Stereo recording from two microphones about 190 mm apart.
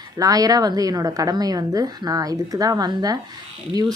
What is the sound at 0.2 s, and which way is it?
Speech, 20° right (ahead or behind).